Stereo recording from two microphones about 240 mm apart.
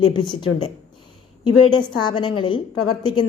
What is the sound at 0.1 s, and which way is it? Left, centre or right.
Speech, centre.